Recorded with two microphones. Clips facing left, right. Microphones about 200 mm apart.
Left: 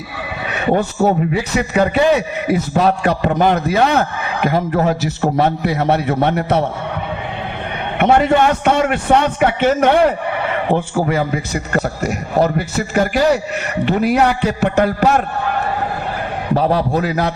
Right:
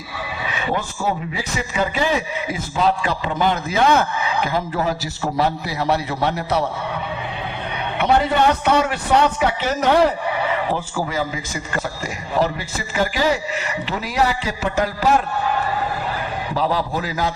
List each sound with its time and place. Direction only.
0.4 s speech: 60° left (ahead or behind)
7.9 s speech: 50° left (ahead or behind)
16.6 s speech: 60° left (ahead or behind)